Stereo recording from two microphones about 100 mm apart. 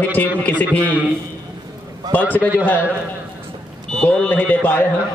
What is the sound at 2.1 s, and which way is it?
Speech, 15° left (ahead or behind).